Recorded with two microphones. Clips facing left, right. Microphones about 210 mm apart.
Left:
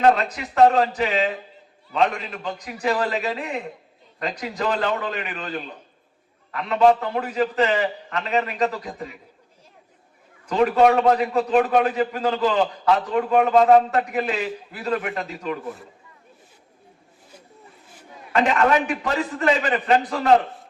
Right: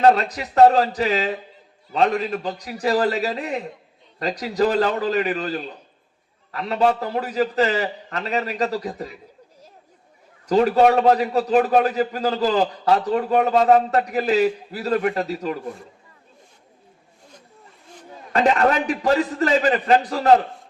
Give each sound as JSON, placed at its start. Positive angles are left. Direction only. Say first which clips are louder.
{"t": 0.0, "sound": "a man's voice", "louder": "right 2 dB", "side_deg": -35}
{"t": 10.4, "sound": "a man's voice", "louder": "right 1 dB", "side_deg": -35}
{"t": 18.3, "sound": "a man's voice", "louder": "right 1 dB", "side_deg": -35}